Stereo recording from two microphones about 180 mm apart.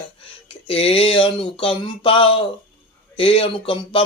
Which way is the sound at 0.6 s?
30° left (ahead or behind).